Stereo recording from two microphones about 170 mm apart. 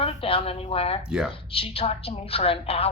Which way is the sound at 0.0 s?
35° left (ahead or behind).